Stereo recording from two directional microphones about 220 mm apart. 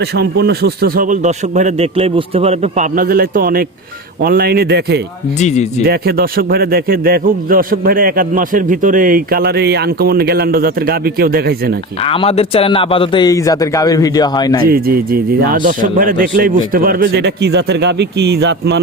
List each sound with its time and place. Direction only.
0.0 s a man's voice: 45° right (ahead or behind)
5.4 s speech: 30° left (ahead or behind)
5.8 s a man's voice: 45° right (ahead or behind)
12.0 s a man's voice: 25° left (ahead or behind)
14.6 s a man's voice: 45° right (ahead or behind)